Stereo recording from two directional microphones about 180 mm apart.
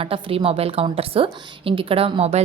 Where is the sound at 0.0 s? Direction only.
30° right (ahead or behind).